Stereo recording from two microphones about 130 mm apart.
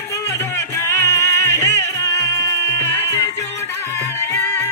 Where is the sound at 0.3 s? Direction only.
20° left (ahead or behind).